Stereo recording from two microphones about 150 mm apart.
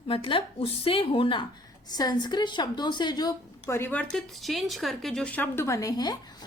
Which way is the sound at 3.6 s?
15° left (ahead or behind).